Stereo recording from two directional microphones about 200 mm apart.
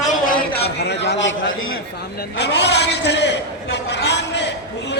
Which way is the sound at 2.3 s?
60° left (ahead or behind).